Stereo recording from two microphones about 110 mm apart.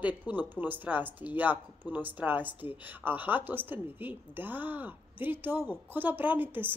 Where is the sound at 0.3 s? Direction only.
15° right (ahead or behind).